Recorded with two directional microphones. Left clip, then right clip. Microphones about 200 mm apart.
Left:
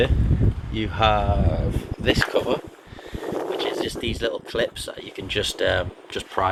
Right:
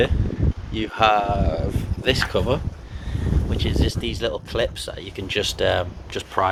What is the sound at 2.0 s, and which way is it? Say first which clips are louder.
Speech: even; centre (ahead or behind).